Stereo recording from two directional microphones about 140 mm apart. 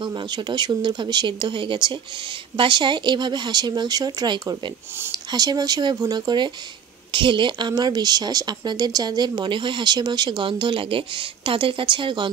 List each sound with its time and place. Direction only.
0.0 s speech: 30° right (ahead or behind)